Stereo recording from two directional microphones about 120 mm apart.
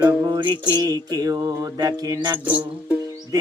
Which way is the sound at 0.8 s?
30° right (ahead or behind).